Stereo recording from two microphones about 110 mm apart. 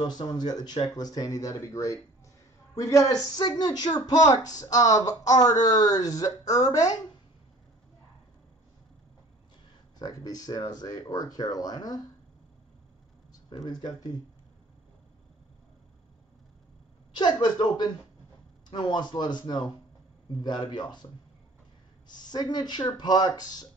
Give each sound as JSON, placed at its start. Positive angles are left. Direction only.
{"t": 0.0, "sound": "speech", "side_deg": 40}
{"t": 9.9, "sound": "speech", "side_deg": 35}
{"t": 13.5, "sound": "speech", "side_deg": 40}
{"t": 17.1, "sound": "speech", "side_deg": 40}